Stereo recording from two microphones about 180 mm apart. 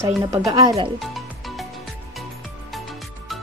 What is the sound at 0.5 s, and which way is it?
Speech, 20° right (ahead or behind).